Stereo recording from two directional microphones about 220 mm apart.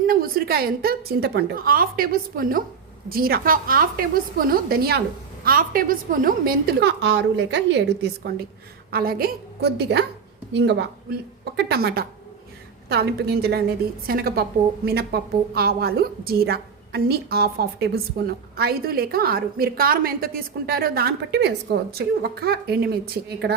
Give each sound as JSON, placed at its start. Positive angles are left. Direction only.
{"t": 0.1, "sound": "a woman's voice", "side_deg": -40}